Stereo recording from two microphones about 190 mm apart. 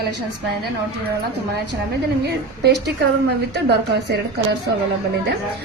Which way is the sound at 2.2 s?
55° right (ahead or behind).